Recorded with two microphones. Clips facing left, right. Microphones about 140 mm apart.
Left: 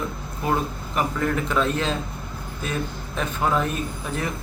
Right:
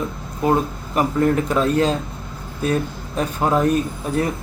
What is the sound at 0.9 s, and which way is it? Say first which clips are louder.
Speech: right 7 dB; 35° right (ahead or behind).